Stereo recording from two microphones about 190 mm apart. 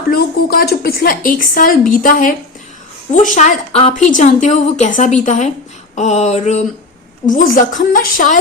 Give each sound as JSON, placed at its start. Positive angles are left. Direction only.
{"t": 0.1, "sound": "a woman's voice", "side_deg": 55}